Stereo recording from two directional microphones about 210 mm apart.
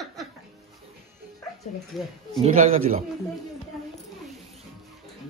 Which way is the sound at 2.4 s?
30° right (ahead or behind).